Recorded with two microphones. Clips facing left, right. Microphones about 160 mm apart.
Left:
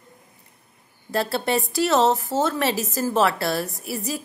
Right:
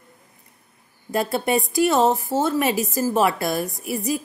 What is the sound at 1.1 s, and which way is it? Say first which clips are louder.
A woman's voice: right 2 dB; 15° right (ahead or behind).